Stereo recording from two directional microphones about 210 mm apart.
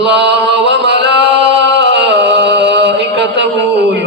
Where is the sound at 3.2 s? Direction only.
55° right (ahead or behind).